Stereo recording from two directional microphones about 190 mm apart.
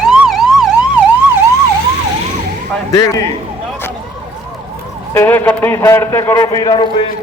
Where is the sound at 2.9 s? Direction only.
15° left (ahead or behind).